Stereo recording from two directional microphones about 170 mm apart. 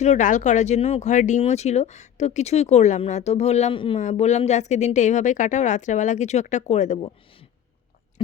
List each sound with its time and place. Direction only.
0.0 s speech: 45° left (ahead or behind)